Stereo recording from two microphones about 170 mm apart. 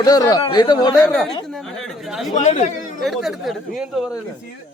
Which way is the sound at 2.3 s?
45° left (ahead or behind).